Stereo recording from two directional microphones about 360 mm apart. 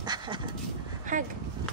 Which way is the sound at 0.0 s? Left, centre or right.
Centre.